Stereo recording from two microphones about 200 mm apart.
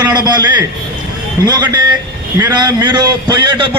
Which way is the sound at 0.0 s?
20° right (ahead or behind).